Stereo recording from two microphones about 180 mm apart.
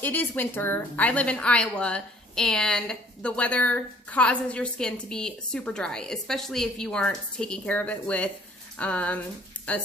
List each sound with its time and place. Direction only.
0.0 s a woman's voice: 10° left (ahead or behind)